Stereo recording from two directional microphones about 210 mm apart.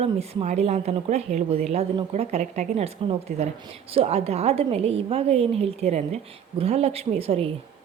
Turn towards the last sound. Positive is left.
turn(degrees=-25)  # may be behind; listen again after turning